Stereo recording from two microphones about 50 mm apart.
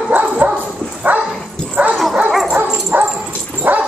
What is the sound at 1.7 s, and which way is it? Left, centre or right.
Dog, right.